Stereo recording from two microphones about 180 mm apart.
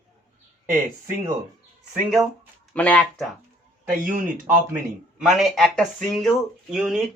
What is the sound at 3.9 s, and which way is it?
Speech, 50° right (ahead or behind).